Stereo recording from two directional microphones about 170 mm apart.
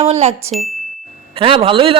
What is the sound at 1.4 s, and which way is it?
Speech, 30° right (ahead or behind).